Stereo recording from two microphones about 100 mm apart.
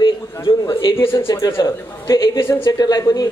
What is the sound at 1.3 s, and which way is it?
A man's voice, 35° left (ahead or behind).